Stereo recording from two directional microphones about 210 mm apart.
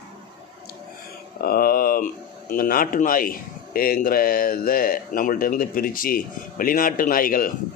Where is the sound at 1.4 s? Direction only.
45° left (ahead or behind).